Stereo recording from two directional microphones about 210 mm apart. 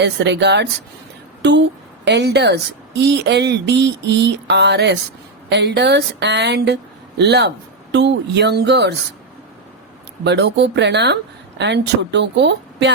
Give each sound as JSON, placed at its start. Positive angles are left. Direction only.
{"t": 0.0, "sound": "speech", "side_deg": -55}
{"t": 10.2, "sound": "speech", "side_deg": -55}